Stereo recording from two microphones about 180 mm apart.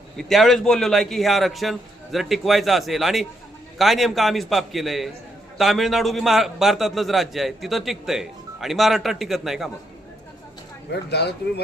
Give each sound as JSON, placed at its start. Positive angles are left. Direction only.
{"t": 0.2, "sound": "a man's voice", "side_deg": 0}
{"t": 10.9, "sound": "speech", "side_deg": 65}